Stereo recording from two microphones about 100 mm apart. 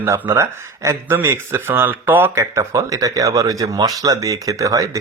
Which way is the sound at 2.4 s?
35° right (ahead or behind).